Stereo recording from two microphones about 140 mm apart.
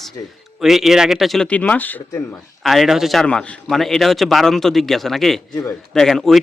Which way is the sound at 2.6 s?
Centre (ahead or behind).